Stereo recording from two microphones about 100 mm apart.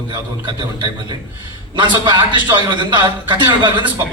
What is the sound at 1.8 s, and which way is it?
A man's voice, 50° right (ahead or behind).